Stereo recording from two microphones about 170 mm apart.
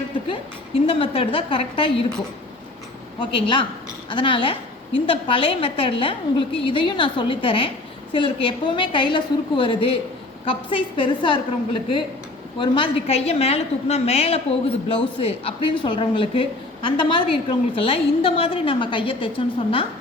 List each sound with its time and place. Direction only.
0.3 s a woman's voice: 35° left (ahead or behind)
3.2 s a woman's voice: 30° left (ahead or behind)